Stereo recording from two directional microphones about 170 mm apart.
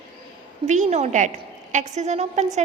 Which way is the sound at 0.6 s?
45° right (ahead or behind).